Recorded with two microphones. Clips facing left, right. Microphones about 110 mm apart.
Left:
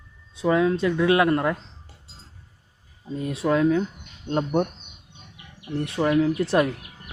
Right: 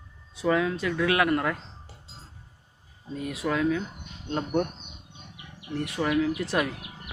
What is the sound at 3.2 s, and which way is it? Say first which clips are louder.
Speech: left 5 dB; 30° left (ahead or behind).